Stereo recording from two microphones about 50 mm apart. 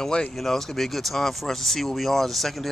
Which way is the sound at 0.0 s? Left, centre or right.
Centre.